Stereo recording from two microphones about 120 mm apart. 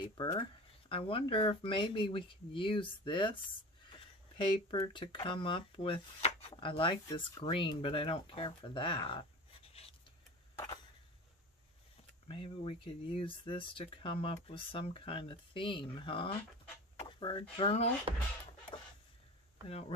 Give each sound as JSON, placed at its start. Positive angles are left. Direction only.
{"t": 0.3, "sound": "speech", "side_deg": 50}
{"t": 10.5, "sound": "a sound", "side_deg": 30}
{"t": 12.3, "sound": "speech", "side_deg": 45}